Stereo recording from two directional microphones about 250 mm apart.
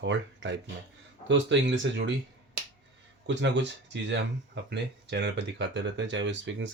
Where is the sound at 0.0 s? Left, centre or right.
Right.